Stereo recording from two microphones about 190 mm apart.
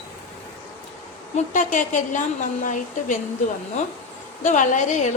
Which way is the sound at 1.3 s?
40° left (ahead or behind).